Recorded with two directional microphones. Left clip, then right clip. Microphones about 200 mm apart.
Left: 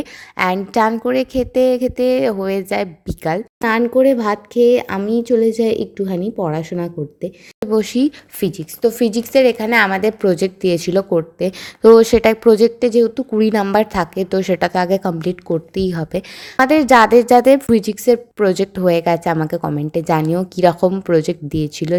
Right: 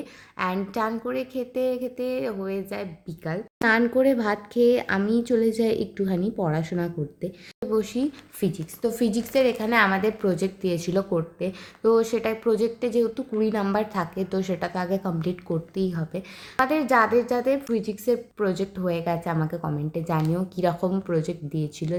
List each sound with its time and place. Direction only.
0.0 s a woman's voice: 40° left (ahead or behind)
3.6 s speech: 30° left (ahead or behind)
7.7 s speech: 40° left (ahead or behind)